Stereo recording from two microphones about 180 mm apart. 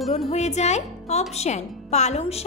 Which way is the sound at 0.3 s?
40° left (ahead or behind).